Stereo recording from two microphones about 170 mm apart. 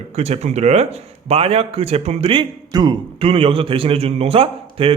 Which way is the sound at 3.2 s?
35° right (ahead or behind).